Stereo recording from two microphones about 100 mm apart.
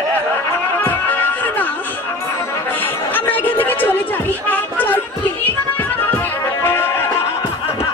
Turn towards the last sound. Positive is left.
turn(degrees=25)  # may be behind; listen again after turning